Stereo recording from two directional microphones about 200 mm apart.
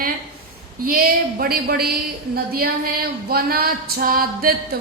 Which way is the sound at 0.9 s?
50° right (ahead or behind).